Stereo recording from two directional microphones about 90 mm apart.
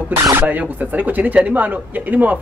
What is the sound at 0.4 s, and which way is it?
A man's voice, 20° right (ahead or behind).